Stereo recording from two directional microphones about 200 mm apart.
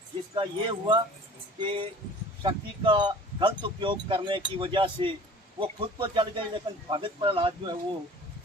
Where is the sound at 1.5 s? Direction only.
25° right (ahead or behind).